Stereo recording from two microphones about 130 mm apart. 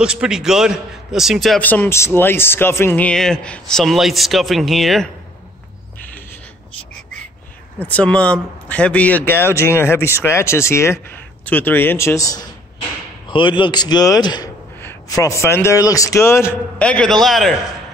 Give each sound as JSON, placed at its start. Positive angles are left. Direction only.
{"t": 0.0, "sound": "a man's voice", "side_deg": -5}
{"t": 1.6, "sound": "speech", "side_deg": 15}
{"t": 7.8, "sound": "speech", "side_deg": 10}
{"t": 13.3, "sound": "a man's voice", "side_deg": 40}
{"t": 16.7, "sound": "a man's voice", "side_deg": 10}